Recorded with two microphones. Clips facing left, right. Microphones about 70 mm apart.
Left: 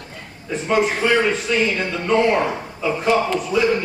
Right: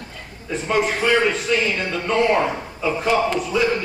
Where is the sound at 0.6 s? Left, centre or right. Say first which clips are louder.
Left 2 dB; centre.